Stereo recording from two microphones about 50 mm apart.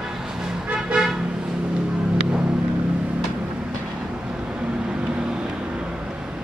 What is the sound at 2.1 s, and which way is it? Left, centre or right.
Music, centre.